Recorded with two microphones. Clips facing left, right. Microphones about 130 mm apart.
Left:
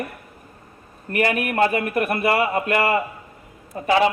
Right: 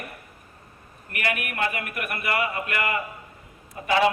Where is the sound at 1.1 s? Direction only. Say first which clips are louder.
Left 9 dB; 30° left (ahead or behind).